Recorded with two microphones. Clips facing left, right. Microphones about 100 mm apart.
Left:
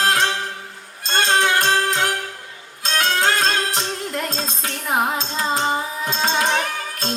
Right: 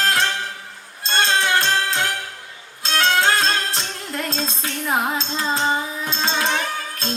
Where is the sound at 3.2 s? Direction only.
35° left (ahead or behind).